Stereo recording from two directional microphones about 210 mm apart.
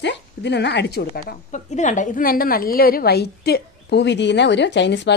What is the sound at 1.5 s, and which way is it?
A woman's voice, 35° left (ahead or behind).